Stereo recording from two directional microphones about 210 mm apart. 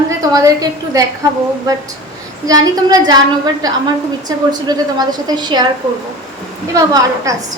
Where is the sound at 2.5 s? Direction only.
15° right (ahead or behind).